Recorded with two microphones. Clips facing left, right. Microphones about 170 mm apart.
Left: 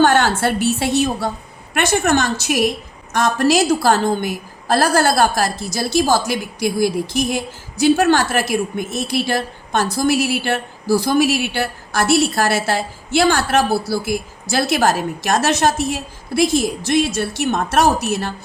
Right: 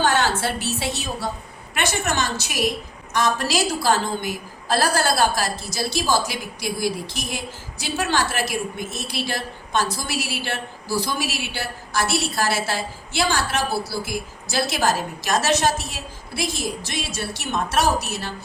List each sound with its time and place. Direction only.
0.0 s a woman's voice: 55° left (ahead or behind)